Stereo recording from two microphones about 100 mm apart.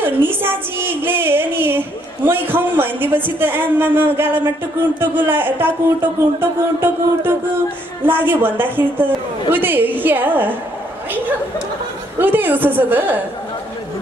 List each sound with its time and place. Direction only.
0.0 s a woman's voice: 20° right (ahead or behind)
12.2 s a woman's voice: 20° right (ahead or behind)